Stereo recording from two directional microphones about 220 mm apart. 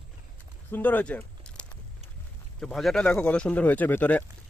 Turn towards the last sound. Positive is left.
turn(degrees=10)  # may be behind; listen again after turning